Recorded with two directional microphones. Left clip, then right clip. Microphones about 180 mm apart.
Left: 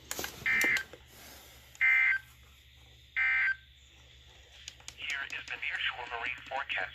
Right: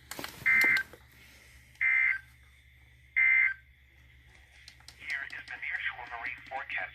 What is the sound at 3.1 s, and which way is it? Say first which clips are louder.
Fire alarm: right 4 dB; 55° left (ahead or behind).